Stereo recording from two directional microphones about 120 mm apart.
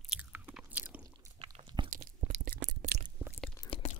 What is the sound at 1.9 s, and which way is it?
Chewing, 65° right (ahead or behind).